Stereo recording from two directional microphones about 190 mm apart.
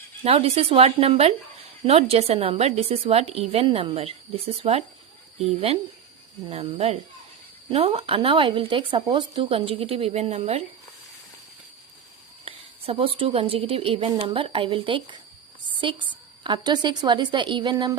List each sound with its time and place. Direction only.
0.3 s a woman's voice: 30° right (ahead or behind)
12.5 s speech: 30° right (ahead or behind)